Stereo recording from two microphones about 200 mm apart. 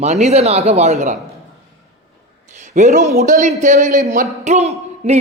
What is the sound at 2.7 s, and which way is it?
A man's voice, 35° right (ahead or behind).